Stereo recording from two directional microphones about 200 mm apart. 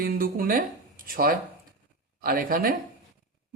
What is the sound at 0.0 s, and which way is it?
A woman's voice, 45° right (ahead or behind).